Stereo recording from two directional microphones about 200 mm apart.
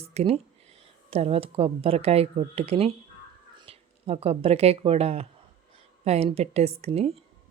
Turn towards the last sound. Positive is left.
turn(degrees=-30)  # may be behind; listen again after turning